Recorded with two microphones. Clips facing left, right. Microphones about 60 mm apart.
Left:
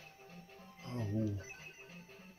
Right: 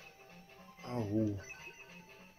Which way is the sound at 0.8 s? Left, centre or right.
Right.